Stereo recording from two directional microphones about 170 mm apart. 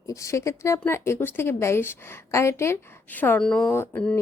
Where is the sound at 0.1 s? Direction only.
20° left (ahead or behind).